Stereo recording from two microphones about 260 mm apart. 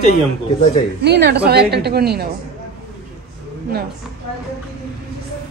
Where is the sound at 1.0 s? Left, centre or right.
Right.